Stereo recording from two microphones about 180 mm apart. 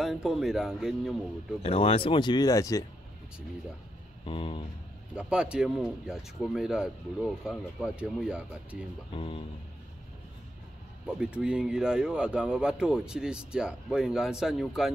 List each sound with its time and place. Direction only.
0.0 s speech: centre (ahead or behind)
1.6 s speech: 35° left (ahead or behind)
4.3 s speech: 30° left (ahead or behind)
5.1 s speech: 5° right (ahead or behind)
9.1 s speech: 30° left (ahead or behind)
11.1 s speech: 5° right (ahead or behind)